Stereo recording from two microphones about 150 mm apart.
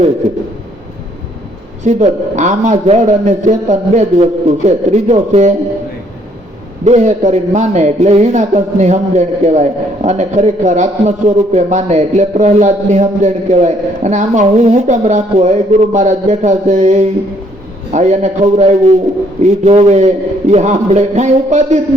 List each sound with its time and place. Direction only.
1.8 s a man's voice: 50° right (ahead or behind)
6.8 s a man's voice: 50° right (ahead or behind)